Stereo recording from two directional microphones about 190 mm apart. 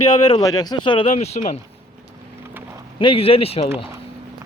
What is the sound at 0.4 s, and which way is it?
Speech, 20° left (ahead or behind).